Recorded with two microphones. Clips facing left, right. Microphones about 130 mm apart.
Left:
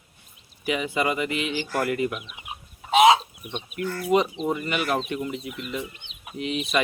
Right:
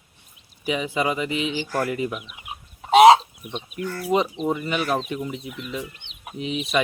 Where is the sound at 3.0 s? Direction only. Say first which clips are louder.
Right 5 dB; 35° right (ahead or behind).